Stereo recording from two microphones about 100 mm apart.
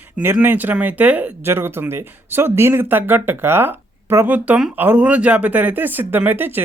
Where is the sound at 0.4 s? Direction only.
20° right (ahead or behind).